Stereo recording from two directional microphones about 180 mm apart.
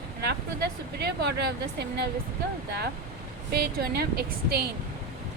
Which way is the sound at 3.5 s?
60° right (ahead or behind).